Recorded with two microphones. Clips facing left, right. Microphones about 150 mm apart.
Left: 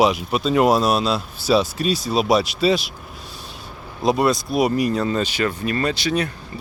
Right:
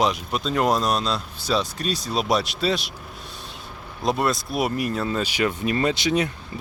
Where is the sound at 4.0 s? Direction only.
Centre (ahead or behind).